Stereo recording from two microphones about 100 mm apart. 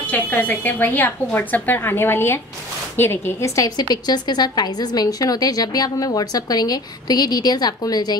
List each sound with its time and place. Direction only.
0.0 s a woman's voice: 15° left (ahead or behind); by 8.2 s 40° left (ahead or behind)